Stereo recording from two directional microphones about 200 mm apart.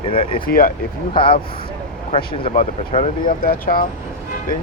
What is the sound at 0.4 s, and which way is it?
Speech, 45° left (ahead or behind).